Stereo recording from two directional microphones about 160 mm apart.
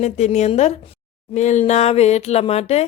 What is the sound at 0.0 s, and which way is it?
A woman's voice, 45° left (ahead or behind).